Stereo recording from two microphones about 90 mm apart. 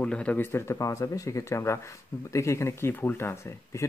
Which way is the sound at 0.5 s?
30° left (ahead or behind).